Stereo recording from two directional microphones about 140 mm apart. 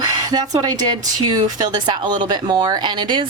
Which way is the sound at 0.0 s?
25° right (ahead or behind).